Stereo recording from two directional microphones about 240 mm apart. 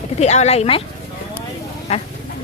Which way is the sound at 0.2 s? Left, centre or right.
Left.